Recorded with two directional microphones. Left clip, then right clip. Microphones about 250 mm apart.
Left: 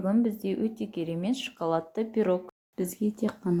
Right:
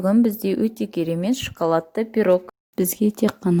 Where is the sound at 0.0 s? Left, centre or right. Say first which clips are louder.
Right 8 dB; right.